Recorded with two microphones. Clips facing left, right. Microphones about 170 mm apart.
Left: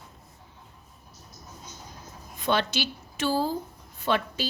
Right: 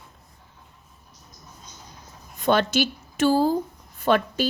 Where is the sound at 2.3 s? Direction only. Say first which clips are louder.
Right 6 dB; 45° right (ahead or behind).